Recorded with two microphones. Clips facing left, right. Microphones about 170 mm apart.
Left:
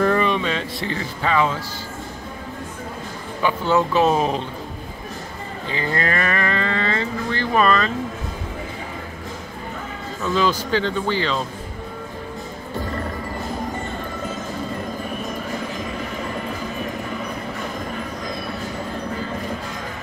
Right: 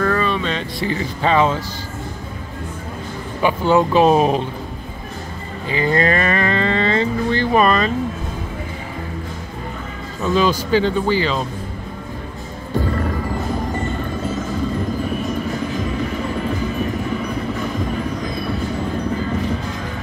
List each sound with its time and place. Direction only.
0.0 s a sound: 20° left (ahead or behind)
0.4 s speech: 5° left (ahead or behind)
1.2 s speech: 25° right (ahead or behind)
3.4 s speech: 15° right (ahead or behind)
5.7 s speech: 15° right (ahead or behind)
10.3 s speech: 15° right (ahead or behind)